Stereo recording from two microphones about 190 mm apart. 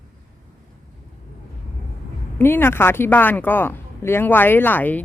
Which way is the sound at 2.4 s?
10° left (ahead or behind).